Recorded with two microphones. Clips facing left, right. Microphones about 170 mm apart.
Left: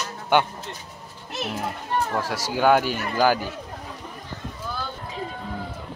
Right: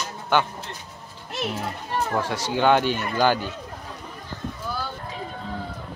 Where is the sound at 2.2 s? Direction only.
5° left (ahead or behind).